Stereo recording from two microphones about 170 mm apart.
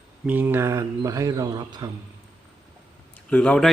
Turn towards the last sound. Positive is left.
turn(degrees=5)  # may be behind; listen again after turning